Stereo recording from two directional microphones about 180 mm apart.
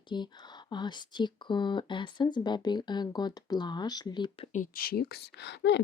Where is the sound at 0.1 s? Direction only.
25° left (ahead or behind).